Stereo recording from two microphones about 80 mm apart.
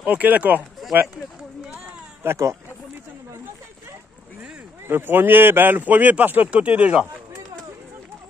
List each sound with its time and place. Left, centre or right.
0.0 s speech: centre
2.2 s speech: right
4.8 s speech: right